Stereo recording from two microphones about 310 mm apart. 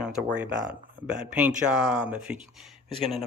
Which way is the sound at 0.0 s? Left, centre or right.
Centre.